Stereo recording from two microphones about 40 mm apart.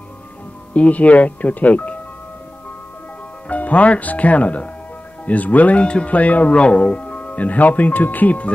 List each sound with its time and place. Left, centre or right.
0.7 s speech: left
3.4 s speech: left